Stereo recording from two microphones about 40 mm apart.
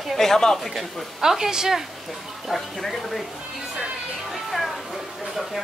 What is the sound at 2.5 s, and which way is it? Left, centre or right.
Speech, centre.